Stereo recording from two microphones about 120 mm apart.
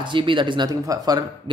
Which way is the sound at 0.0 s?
45° right (ahead or behind).